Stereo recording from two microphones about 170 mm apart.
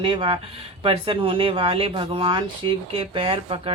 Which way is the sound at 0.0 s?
30° right (ahead or behind).